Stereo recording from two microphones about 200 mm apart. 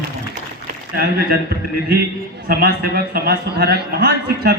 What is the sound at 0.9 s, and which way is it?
Speech, 50° right (ahead or behind).